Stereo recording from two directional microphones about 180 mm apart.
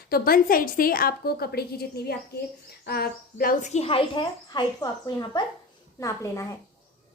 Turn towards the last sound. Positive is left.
turn(degrees=15)  # may be behind; listen again after turning